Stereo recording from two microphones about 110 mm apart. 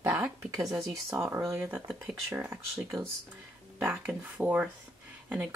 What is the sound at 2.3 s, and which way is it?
Speech, 25° right (ahead or behind).